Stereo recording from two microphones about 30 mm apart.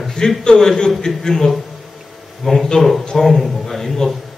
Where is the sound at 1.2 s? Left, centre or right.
Centre.